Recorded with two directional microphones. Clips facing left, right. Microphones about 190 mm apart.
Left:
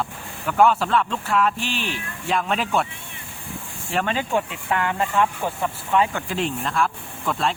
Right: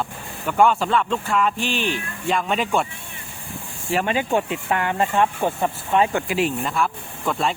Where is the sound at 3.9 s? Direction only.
10° right (ahead or behind).